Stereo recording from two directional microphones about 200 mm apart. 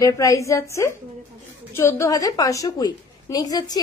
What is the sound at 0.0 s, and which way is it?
A woman's voice, 15° left (ahead or behind).